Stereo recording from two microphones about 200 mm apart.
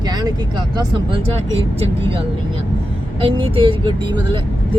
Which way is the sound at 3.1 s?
25° right (ahead or behind).